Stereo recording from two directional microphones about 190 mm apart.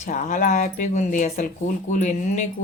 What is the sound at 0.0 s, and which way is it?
Speech, 40° left (ahead or behind).